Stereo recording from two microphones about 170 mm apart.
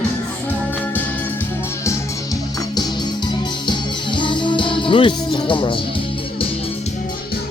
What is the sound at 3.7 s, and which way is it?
Music, 30° left (ahead or behind).